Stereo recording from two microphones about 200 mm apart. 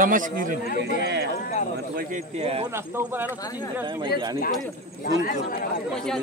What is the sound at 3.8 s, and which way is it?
Speech, 25° right (ahead or behind).